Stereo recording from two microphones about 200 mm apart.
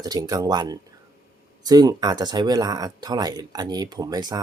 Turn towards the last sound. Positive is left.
turn(degrees=-20)  # may be behind; listen again after turning